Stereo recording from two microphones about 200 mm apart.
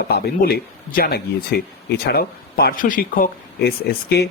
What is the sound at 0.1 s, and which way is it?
Speech, 50° left (ahead or behind).